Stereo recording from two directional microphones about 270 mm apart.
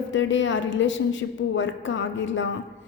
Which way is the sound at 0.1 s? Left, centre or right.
Left.